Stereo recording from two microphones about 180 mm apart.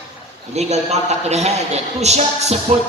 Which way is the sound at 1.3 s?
35° right (ahead or behind).